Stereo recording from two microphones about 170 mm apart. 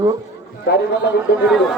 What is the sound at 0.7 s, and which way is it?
Speech, 75° left (ahead or behind).